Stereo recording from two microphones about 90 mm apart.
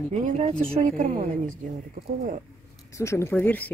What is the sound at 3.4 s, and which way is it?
Speech, 20° left (ahead or behind).